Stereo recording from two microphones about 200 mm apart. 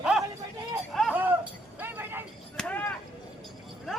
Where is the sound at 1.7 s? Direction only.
10° right (ahead or behind).